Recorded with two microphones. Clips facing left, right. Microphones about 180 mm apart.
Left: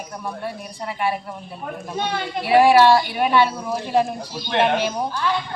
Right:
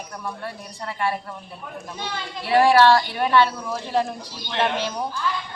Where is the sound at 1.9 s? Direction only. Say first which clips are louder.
Left 8 dB; 65° left (ahead or behind).